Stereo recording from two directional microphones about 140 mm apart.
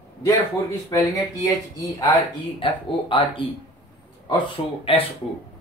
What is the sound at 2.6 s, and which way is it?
Speech, 40° left (ahead or behind).